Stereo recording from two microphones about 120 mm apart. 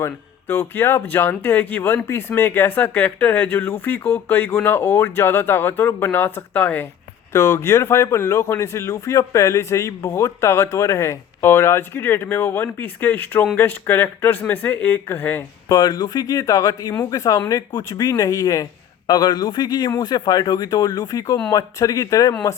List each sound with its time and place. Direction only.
0.0 s speech: 20° left (ahead or behind)
7.3 s speech: 25° left (ahead or behind)
15.7 s a man's voice: 35° left (ahead or behind)